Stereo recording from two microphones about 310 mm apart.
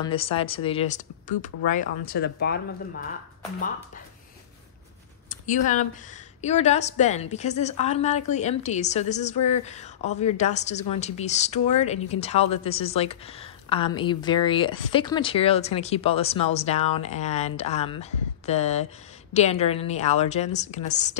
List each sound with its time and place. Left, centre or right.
0.0 s a woman's voice: centre
5.3 s a woman's voice: left